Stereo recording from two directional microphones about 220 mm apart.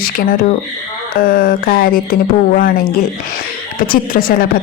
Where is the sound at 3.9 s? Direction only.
40° left (ahead or behind).